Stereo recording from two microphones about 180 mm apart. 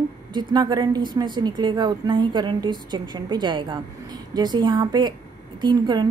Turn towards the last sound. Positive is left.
turn(degrees=-25)  # may be behind; listen again after turning